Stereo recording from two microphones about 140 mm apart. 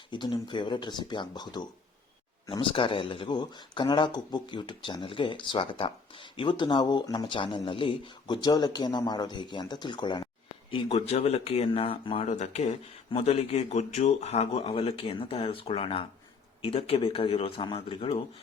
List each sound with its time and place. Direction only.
0.1 s speech: 35° left (ahead or behind)
12.3 s speech: 55° left (ahead or behind); by 18.2 s 40° left (ahead or behind)